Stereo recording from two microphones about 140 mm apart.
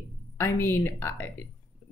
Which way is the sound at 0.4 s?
20° left (ahead or behind).